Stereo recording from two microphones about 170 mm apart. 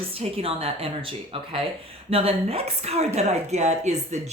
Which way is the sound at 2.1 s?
35° right (ahead or behind).